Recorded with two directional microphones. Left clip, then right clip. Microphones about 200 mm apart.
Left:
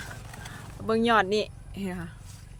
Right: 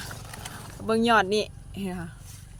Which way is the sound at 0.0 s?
20° right (ahead or behind).